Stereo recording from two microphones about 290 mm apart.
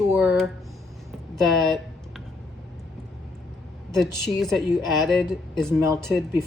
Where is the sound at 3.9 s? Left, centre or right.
Centre.